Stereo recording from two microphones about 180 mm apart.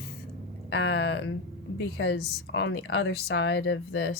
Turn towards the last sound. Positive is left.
turn(degrees=70)  # may be behind; listen again after turning